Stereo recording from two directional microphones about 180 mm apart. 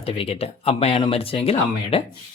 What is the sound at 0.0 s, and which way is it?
Speech, 30° left (ahead or behind).